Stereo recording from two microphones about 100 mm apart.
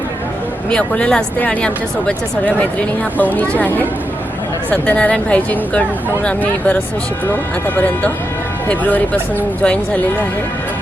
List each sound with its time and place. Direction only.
0.7 s speech: 10° left (ahead or behind)
7.8 s speech: 15° left (ahead or behind)